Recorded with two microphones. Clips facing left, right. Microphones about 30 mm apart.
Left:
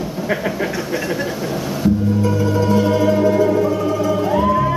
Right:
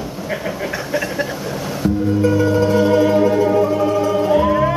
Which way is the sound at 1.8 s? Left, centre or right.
Centre.